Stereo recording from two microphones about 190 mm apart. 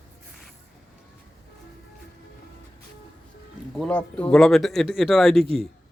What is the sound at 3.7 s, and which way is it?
Speech, 5° left (ahead or behind).